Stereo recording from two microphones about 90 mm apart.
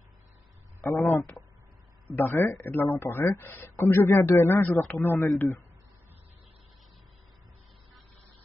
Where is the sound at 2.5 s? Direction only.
20° left (ahead or behind).